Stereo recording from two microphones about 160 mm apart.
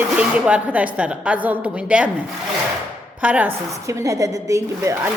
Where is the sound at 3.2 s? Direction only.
10° right (ahead or behind).